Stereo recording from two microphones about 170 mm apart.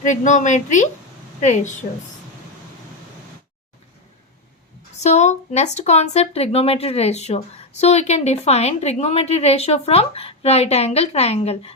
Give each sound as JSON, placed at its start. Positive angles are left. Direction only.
{"t": 0.0, "sound": "a woman's voice", "side_deg": 45}
{"t": 4.9, "sound": "speech", "side_deg": 40}